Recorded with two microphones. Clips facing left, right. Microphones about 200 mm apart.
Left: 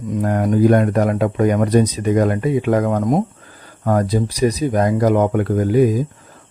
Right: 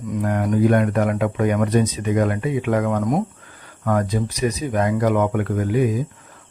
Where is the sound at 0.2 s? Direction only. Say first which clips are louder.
Left 3 dB; 40° left (ahead or behind).